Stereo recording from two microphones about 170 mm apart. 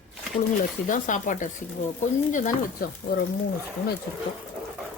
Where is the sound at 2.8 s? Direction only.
55° left (ahead or behind).